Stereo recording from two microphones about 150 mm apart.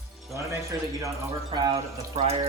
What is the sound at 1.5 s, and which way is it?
Speech, 30° right (ahead or behind).